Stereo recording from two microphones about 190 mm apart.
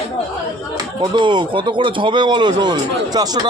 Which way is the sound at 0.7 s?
20° right (ahead or behind).